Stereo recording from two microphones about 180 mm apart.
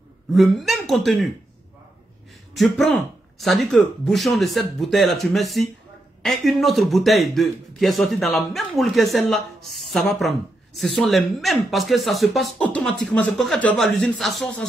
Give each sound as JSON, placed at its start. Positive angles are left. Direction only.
{"t": 0.3, "sound": "speech", "side_deg": 0}
{"t": 2.5, "sound": "a man's voice", "side_deg": 0}